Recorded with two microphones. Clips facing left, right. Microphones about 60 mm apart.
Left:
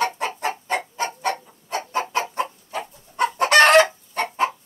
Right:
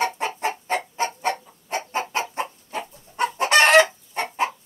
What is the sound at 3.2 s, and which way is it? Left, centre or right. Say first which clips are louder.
Chicken: left 3 dB; left.